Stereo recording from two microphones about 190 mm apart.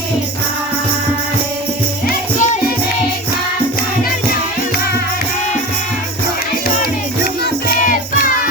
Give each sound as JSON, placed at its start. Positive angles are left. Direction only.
{"t": 2.0, "sound": "music", "side_deg": 45}
{"t": 7.4, "sound": "music", "side_deg": 50}